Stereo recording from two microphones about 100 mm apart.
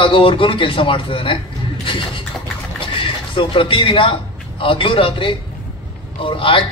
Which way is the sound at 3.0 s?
60° left (ahead or behind).